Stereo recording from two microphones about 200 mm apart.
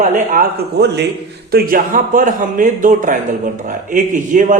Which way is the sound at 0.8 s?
55° right (ahead or behind).